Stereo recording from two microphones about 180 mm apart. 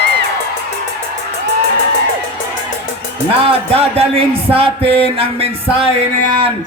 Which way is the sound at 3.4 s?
35° right (ahead or behind).